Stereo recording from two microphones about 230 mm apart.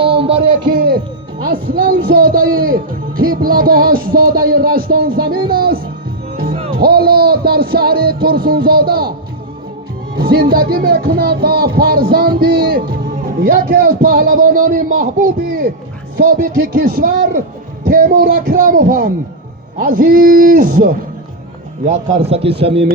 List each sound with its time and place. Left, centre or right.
0.2 s music: right
1.4 s speech: right
6.3 s music: right
6.7 s speech: right
10.2 s a man's voice: right